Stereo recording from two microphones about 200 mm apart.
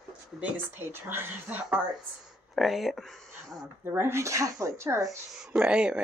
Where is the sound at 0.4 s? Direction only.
10° right (ahead or behind).